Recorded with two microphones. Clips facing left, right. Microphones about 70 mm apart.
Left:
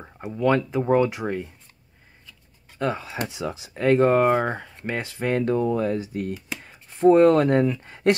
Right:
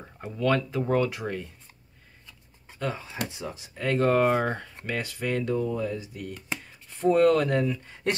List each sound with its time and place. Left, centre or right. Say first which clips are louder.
0.0 s speech: left 5 dB; centre
3.3 s speech: left 6 dB; left
3.7 s speech: left 8 dB; left
4.0 s speech: left 1 dB; centre
4.8 s speech: left 4 dB; left
6.6 s speech: left 8 dB; left
7.6 s speech: left 5 dB; left